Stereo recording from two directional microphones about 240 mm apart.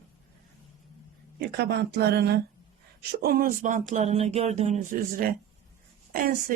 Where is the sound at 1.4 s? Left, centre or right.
Right.